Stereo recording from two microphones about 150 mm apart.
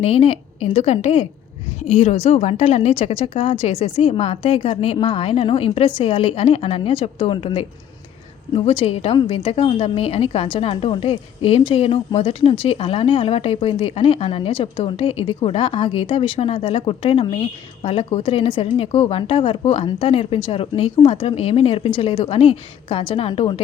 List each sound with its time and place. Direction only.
0.0 s a woman's voice: 40° left (ahead or behind)